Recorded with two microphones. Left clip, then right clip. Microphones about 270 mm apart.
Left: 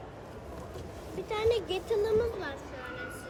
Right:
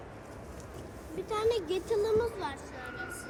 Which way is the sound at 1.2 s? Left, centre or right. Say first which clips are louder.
Left 1 dB; centre.